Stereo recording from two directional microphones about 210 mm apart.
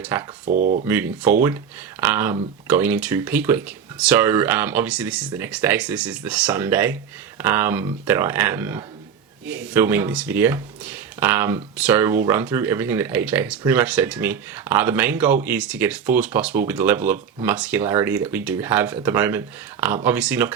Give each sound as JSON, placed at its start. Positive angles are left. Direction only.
{"t": 0.0, "sound": "speech", "side_deg": -10}
{"t": 0.4, "sound": "speech", "side_deg": -40}
{"t": 0.9, "sound": "speech", "side_deg": -10}